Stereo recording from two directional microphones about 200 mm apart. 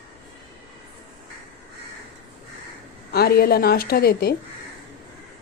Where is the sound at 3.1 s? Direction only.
50° left (ahead or behind).